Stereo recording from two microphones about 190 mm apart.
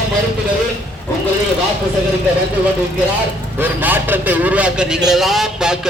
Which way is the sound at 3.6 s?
10° right (ahead or behind).